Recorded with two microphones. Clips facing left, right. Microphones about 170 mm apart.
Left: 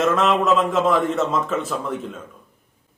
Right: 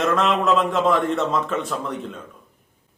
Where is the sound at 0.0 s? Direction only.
Centre (ahead or behind).